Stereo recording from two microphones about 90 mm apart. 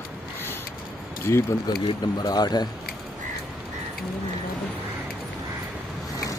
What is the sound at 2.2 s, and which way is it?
Speech, 50° left (ahead or behind).